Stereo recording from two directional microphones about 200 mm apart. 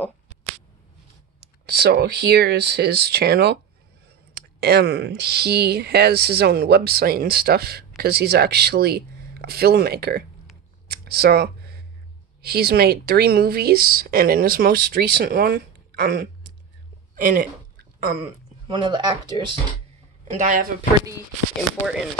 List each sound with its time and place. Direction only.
1.4 s speech: 50° right (ahead or behind)
4.6 s speech: 55° right (ahead or behind)
10.9 s a sound: 50° right (ahead or behind)
12.4 s speech: 50° right (ahead or behind)
18.7 s speech: 25° right (ahead or behind)
20.3 s speech: 40° right (ahead or behind)
21.6 s speech: centre (ahead or behind)